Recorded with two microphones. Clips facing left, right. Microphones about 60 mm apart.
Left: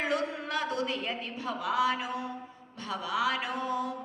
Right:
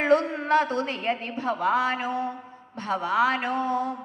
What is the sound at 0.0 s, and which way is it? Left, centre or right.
A woman's voice, right.